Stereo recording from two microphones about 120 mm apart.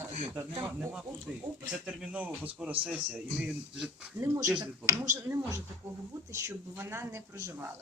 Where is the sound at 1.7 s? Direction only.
5° right (ahead or behind).